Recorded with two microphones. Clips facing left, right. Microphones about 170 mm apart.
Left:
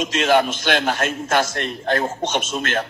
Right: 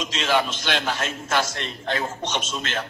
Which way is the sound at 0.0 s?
55° left (ahead or behind).